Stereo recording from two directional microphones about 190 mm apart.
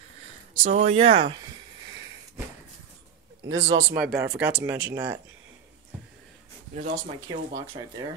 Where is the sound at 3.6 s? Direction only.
35° right (ahead or behind).